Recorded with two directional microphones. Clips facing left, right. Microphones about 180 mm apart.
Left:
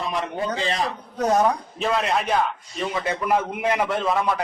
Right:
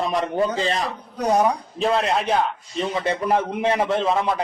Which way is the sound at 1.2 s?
10° right (ahead or behind).